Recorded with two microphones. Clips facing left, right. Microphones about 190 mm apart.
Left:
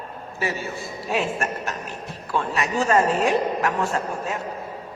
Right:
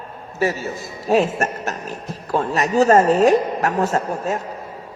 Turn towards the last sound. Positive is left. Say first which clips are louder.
# right 5 dB
turn(degrees=-40)  # may be behind; listen again after turning